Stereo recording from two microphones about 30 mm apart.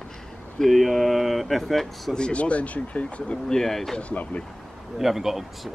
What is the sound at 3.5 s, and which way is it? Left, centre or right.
Speech, centre.